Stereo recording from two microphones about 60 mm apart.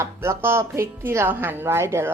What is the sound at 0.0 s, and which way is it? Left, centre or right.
Speech, right.